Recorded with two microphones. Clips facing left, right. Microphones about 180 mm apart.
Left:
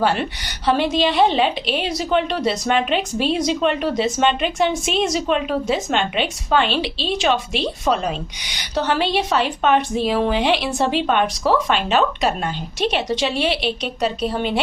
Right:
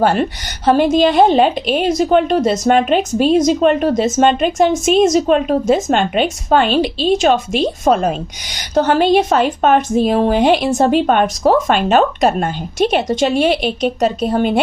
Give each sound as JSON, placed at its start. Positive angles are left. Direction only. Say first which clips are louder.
{"t": 0.0, "sound": "a woman's voice", "louder": "right 5 dB", "side_deg": -45}